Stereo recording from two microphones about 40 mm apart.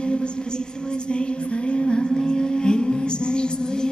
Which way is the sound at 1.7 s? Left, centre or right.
Left.